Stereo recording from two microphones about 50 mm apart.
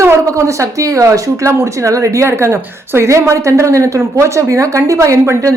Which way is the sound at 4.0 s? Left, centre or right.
Right.